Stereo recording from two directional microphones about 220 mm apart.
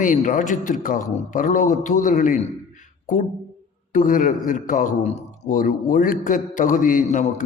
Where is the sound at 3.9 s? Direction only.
35° left (ahead or behind).